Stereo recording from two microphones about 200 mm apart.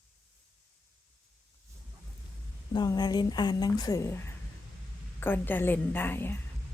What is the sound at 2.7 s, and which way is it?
Speech, 20° left (ahead or behind).